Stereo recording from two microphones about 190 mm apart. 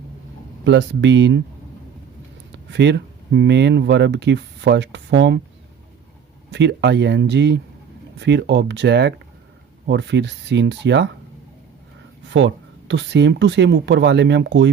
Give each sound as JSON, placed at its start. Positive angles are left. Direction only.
{"t": 0.6, "sound": "speech", "side_deg": -70}
{"t": 2.6, "sound": "speech", "side_deg": -65}
{"t": 6.5, "sound": "speech", "side_deg": -65}
{"t": 12.3, "sound": "speech", "side_deg": -70}